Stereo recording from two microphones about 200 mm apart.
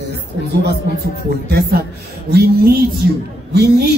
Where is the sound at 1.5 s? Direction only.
50° right (ahead or behind).